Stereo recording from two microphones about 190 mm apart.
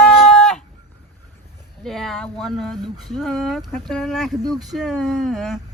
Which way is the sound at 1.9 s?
Centre (ahead or behind).